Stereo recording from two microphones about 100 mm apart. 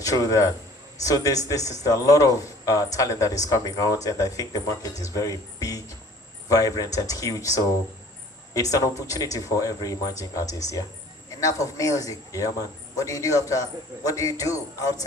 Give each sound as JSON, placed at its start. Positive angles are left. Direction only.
{"t": 0.0, "sound": "a man's voice", "side_deg": 35}